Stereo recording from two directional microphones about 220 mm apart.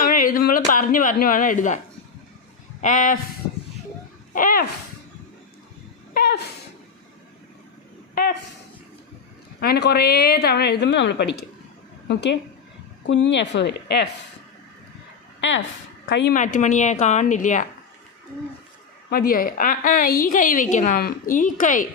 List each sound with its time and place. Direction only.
0.0 s speech: 40° left (ahead or behind)
2.8 s a woman's voice: 35° left (ahead or behind)
4.4 s a woman's voice: 40° left (ahead or behind)
6.1 s a sound: 50° left (ahead or behind)
8.1 s a man's voice: 45° left (ahead or behind)
9.6 s a woman's voice: 45° left (ahead or behind)
15.4 s speech: 60° left (ahead or behind)
16.3 s a woman's voice: 35° left (ahead or behind)
19.1 s a woman's voice: 40° left (ahead or behind)